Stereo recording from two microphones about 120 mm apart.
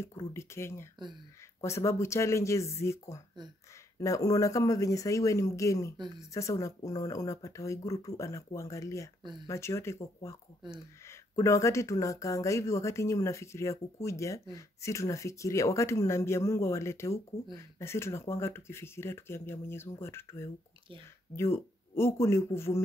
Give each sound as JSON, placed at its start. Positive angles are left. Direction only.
{"t": 0.0, "sound": "speech", "side_deg": 20}
{"t": 9.2, "sound": "speech", "side_deg": -40}
{"t": 9.5, "sound": "speech", "side_deg": 20}